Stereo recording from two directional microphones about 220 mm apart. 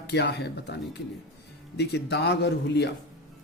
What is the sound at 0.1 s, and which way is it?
Speech, 50° left (ahead or behind).